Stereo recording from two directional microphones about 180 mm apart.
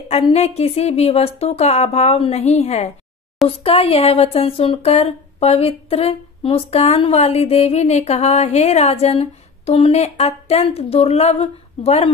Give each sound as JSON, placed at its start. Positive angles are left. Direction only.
{"t": 0.1, "sound": "speech", "side_deg": 35}